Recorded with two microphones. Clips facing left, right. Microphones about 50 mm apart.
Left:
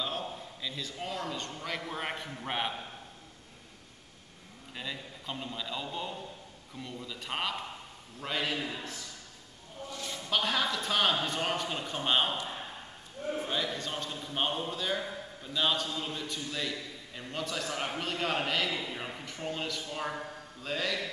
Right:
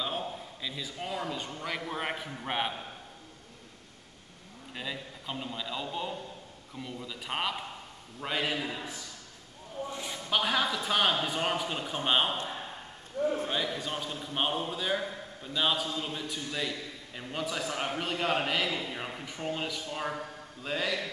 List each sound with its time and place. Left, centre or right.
0.0 s a man's voice: centre
4.7 s a man's voice: centre
9.8 s a man's voice: centre
13.2 s a sound: right
13.5 s a man's voice: centre